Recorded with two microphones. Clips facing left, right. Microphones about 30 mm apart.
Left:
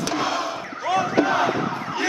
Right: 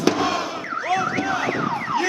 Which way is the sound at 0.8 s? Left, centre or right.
Centre.